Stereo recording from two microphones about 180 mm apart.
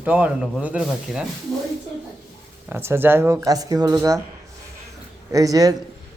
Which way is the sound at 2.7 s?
10° right (ahead or behind).